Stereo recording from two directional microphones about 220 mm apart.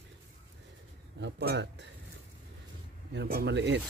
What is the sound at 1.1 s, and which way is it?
Speech, 50° right (ahead or behind).